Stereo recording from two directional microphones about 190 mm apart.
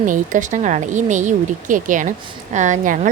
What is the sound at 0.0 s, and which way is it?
Speech, 45° right (ahead or behind).